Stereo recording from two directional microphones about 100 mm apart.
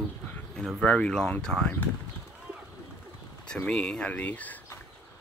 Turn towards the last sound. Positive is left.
turn(degrees=15)  # may be behind; listen again after turning